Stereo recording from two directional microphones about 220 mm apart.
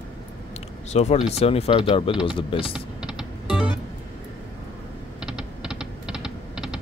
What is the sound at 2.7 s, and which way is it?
Typing, 5° right (ahead or behind).